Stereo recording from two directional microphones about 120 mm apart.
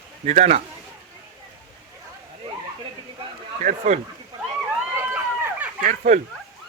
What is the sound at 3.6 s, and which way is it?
Speech, 75° right (ahead or behind).